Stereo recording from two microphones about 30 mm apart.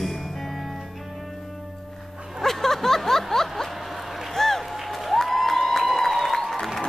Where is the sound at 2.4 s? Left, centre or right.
Centre.